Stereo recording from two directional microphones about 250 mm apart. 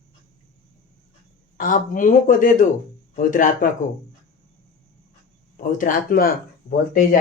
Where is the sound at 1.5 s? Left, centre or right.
Left.